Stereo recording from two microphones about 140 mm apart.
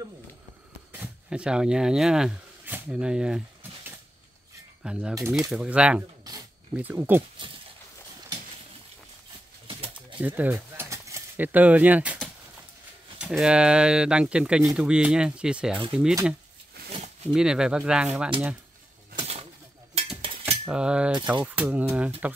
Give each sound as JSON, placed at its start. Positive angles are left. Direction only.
{"t": 0.9, "sound": "speech", "side_deg": -10}
{"t": 4.8, "sound": "speech", "side_deg": -5}
{"t": 5.1, "sound": "speech", "side_deg": -25}
{"t": 5.5, "sound": "speech", "side_deg": -5}
{"t": 9.7, "sound": "pigeon", "side_deg": -40}
{"t": 10.2, "sound": "speech", "side_deg": -10}
{"t": 13.2, "sound": "speech", "side_deg": -5}
{"t": 17.3, "sound": "speech", "side_deg": -5}
{"t": 20.2, "sound": "cutlery", "side_deg": -40}
{"t": 20.6, "sound": "speech", "side_deg": -5}